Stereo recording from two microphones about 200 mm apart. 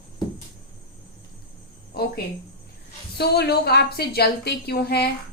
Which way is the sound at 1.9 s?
50° left (ahead or behind).